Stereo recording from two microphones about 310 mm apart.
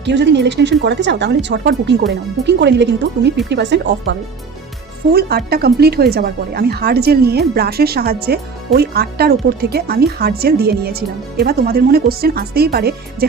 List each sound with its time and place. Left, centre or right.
0.0 s speech: right
5.1 s speech: right